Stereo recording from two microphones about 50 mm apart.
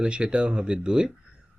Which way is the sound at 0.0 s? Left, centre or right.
Centre.